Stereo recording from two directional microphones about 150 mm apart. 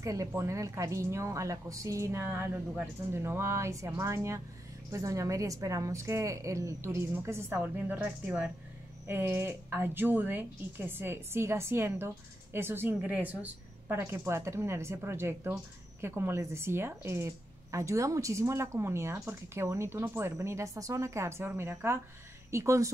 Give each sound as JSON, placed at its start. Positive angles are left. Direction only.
{"t": 0.0, "sound": "a woman's voice", "side_deg": -20}